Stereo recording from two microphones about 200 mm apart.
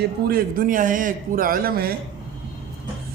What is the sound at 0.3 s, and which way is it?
A man's voice, 45° right (ahead or behind).